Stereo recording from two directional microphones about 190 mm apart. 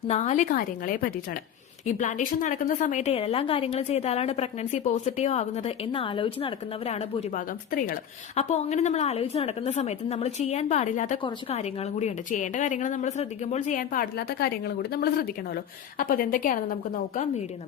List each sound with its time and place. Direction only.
0.1 s a woman's voice: 35° left (ahead or behind)
7.7 s a woman's voice: 50° left (ahead or behind)
8.4 s a woman's voice: 35° left (ahead or behind)
11.2 s a woman's voice: 30° left (ahead or behind); by 16.6 s 45° left (ahead or behind)